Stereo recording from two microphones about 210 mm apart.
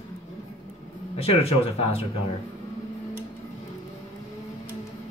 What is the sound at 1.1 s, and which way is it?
Speech, 30° left (ahead or behind).